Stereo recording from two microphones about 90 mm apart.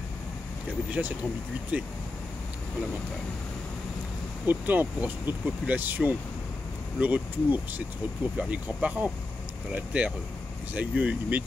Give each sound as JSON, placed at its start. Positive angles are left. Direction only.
{"t": 1.0, "sound": "speech", "side_deg": -15}
{"t": 4.5, "sound": "speech", "side_deg": -20}